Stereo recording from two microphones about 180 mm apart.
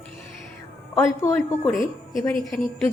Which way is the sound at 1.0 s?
15° left (ahead or behind).